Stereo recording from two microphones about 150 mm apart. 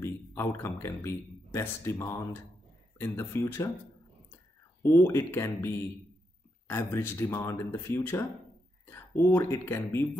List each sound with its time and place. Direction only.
0.0 s speech: 15° left (ahead or behind)
4.8 s speech: 20° left (ahead or behind)
6.7 s speech: 15° left (ahead or behind)